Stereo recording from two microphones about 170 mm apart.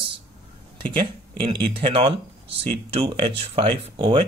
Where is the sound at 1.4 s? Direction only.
30° right (ahead or behind).